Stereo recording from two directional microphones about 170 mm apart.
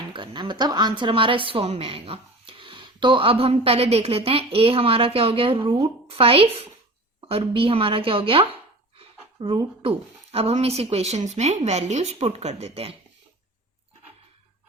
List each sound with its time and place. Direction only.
0.1 s a woman's voice: 25° right (ahead or behind)
9.0 s a sound: 30° right (ahead or behind)
10.3 s a woman's voice: 35° right (ahead or behind)